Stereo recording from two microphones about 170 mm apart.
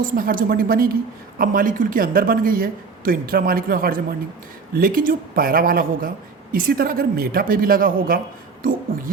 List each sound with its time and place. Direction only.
0.0 s speech: 55° right (ahead or behind)